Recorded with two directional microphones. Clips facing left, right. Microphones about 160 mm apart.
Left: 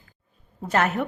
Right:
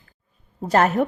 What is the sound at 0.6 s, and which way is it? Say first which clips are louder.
Speech: right 5 dB; 35° right (ahead or behind).